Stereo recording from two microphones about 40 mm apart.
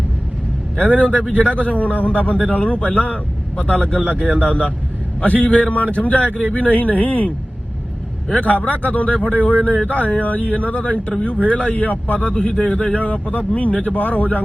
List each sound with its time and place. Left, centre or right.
0.9 s a man's voice: left
12.3 s a man's voice: left